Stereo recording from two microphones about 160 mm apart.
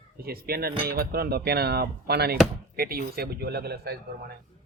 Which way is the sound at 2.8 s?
70° right (ahead or behind).